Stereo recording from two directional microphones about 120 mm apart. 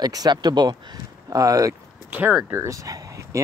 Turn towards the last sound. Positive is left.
turn(degrees=-25)  # may be behind; listen again after turning